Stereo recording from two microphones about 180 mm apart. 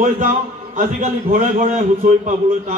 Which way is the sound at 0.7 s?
45° right (ahead or behind).